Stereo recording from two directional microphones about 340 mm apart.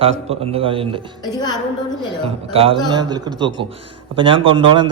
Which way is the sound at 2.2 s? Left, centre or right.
Centre.